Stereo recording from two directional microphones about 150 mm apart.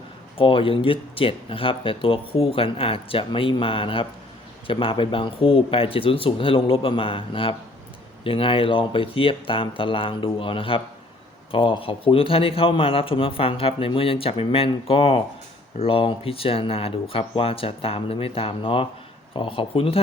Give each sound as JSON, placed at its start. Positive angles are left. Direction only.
{"t": 0.3, "sound": "speech", "side_deg": 35}